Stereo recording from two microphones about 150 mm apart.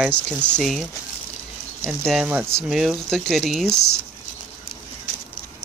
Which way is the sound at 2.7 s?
Centre (ahead or behind).